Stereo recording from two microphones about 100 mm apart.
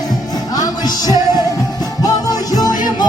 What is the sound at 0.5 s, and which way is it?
Music, 40° left (ahead or behind).